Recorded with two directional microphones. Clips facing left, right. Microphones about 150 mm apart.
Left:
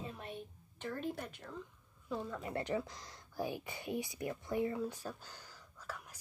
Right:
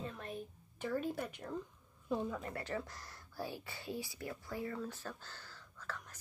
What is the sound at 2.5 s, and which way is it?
Speech, 15° left (ahead or behind).